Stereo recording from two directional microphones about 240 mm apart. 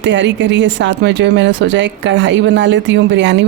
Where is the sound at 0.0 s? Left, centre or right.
Right.